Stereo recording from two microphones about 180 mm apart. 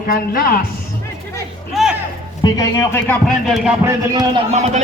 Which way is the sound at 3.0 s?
Centre (ahead or behind).